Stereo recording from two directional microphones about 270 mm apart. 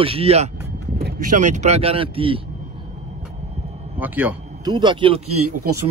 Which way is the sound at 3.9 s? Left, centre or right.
Centre.